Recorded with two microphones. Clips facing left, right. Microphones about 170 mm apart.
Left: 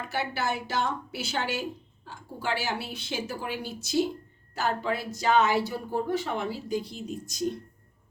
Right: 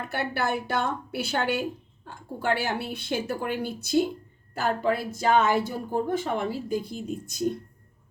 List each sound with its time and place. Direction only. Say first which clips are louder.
0.1 s a woman's voice: right 2 dB; 55° right (ahead or behind)